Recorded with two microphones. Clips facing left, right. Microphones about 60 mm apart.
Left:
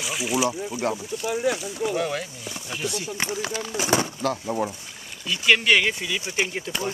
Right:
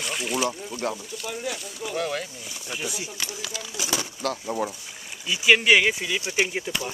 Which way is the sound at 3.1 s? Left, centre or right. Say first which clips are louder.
Left 6 dB; left.